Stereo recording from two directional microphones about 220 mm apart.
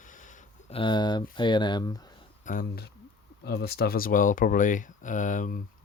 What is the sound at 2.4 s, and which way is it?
Speech, 40° left (ahead or behind).